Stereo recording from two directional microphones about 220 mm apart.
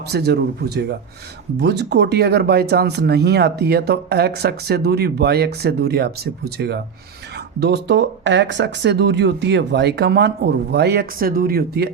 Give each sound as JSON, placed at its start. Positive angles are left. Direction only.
{"t": 0.1, "sound": "speech", "side_deg": -45}